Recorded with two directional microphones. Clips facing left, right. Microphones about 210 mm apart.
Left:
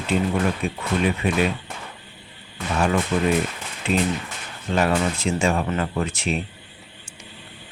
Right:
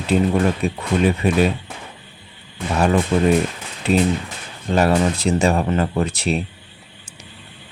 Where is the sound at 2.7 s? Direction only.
35° right (ahead or behind).